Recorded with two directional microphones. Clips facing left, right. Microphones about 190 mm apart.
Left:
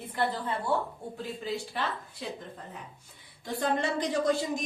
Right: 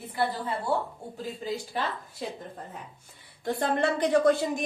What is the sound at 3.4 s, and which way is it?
A woman's voice, 55° right (ahead or behind).